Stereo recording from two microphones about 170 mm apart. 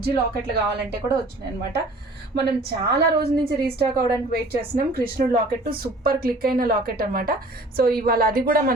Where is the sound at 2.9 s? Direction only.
70° right (ahead or behind).